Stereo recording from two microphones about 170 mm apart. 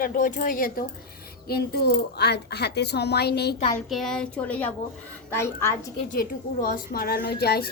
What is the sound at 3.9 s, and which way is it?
A woman's voice, centre (ahead or behind).